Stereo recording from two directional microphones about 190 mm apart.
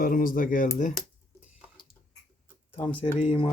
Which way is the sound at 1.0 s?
Centre (ahead or behind).